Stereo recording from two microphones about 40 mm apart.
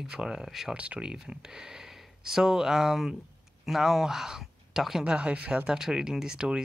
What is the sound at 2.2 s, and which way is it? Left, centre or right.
Speech, centre.